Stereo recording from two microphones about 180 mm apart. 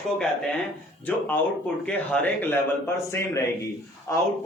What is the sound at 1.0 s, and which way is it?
Speech, 10° left (ahead or behind).